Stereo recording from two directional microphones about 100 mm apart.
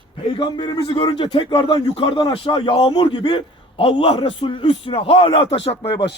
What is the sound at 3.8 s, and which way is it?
A man's voice, 65° left (ahead or behind).